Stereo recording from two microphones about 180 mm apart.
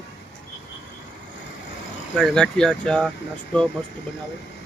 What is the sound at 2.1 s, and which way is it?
Speech, centre (ahead or behind).